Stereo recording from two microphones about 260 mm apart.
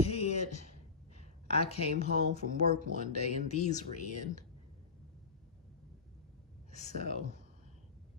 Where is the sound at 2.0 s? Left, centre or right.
Left.